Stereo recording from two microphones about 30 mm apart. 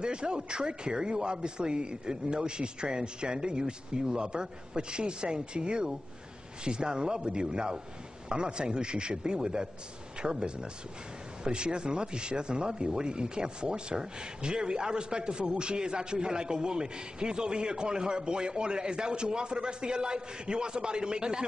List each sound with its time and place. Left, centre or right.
0.0 s speech: right